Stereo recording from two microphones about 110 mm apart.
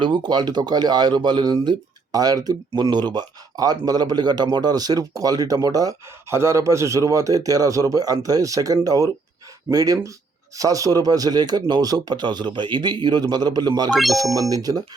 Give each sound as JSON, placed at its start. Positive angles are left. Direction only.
{"t": 0.0, "sound": "speech", "side_deg": -45}
{"t": 13.9, "sound": "speech", "side_deg": 0}
{"t": 14.5, "sound": "speech", "side_deg": -35}